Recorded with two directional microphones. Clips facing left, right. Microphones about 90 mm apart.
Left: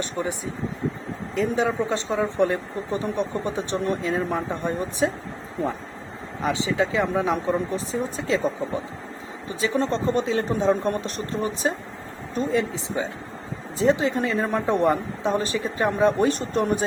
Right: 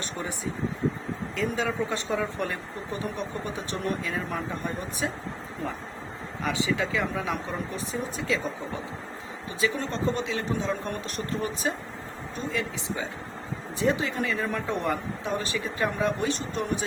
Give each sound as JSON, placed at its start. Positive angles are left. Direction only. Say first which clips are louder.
{"t": 0.0, "sound": "speech", "louder": "left 6 dB", "side_deg": 20}
{"t": 1.4, "sound": "speech", "louder": "left 6 dB", "side_deg": 25}
{"t": 6.4, "sound": "speech", "louder": "left 4 dB", "side_deg": 25}